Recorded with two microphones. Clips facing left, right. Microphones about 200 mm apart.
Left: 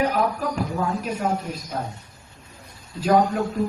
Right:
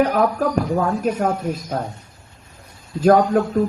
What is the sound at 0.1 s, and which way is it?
Speech, 50° right (ahead or behind).